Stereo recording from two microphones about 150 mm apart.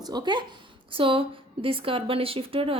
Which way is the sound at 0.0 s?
30° right (ahead or behind).